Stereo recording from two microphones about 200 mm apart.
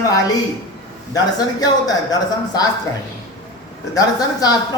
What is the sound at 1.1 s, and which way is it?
Speech, 20° left (ahead or behind).